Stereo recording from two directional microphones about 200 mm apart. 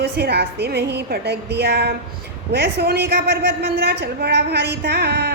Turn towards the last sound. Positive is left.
turn(degrees=-55)  # may be behind; listen again after turning